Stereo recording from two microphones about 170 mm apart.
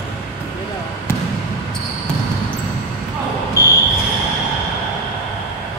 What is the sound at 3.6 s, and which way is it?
Smoke detector, 15° left (ahead or behind).